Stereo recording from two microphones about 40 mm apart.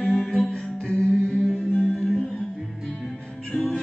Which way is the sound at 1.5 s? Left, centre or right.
Left.